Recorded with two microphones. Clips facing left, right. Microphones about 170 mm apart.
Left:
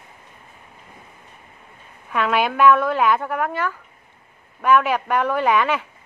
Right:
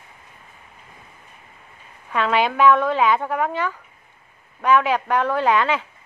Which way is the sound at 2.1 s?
5° left (ahead or behind).